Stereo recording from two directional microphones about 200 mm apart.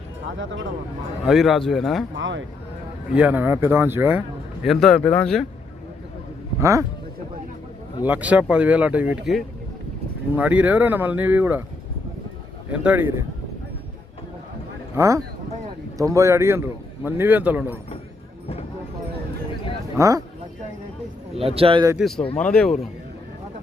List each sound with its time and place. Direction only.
0.3 s speech: 75° right (ahead or behind)
1.2 s a man's voice: centre (ahead or behind)
2.1 s speech: 65° right (ahead or behind)
3.1 s a man's voice: 5° right (ahead or behind)
6.6 s a man's voice: 15° right (ahead or behind)
8.0 s a man's voice: 5° right (ahead or behind)
12.7 s a man's voice: 5° right (ahead or behind)
14.9 s a man's voice: 15° right (ahead or behind)
20.0 s a man's voice: 15° right (ahead or behind)
21.3 s speech: 30° right (ahead or behind)
21.9 s a man's voice: centre (ahead or behind)